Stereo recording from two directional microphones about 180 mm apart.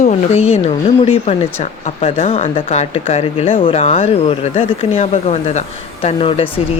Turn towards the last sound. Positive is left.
turn(degrees=30)  # may be behind; listen again after turning